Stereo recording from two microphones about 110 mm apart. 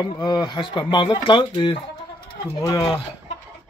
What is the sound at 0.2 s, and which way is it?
Speech, 40° left (ahead or behind).